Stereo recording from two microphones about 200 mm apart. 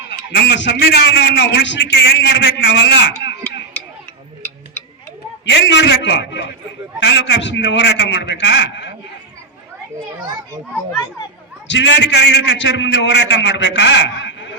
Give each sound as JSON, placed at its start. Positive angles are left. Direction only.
{"t": 0.1, "sound": "a man's voice", "side_deg": 60}
{"t": 5.6, "sound": "a man's voice", "side_deg": 60}
{"t": 11.7, "sound": "a man's voice", "side_deg": 65}